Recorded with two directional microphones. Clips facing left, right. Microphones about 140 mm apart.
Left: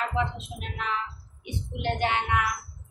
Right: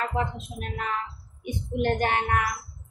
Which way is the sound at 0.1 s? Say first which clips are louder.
Even; 50° right (ahead or behind).